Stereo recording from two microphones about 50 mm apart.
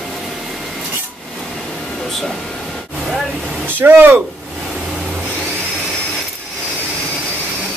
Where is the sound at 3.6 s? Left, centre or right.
Right.